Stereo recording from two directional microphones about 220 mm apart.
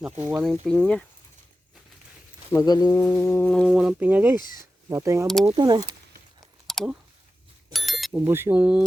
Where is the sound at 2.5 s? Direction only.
15° left (ahead or behind); by 5.8 s 20° right (ahead or behind).